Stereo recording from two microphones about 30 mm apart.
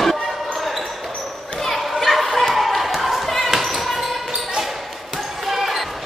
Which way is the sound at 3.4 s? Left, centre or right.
Centre.